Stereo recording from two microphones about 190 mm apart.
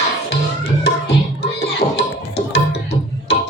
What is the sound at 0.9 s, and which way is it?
Music, 60° left (ahead or behind).